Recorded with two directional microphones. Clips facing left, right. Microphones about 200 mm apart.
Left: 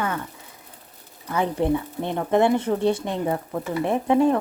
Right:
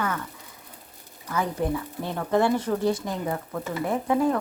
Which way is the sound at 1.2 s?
30° left (ahead or behind).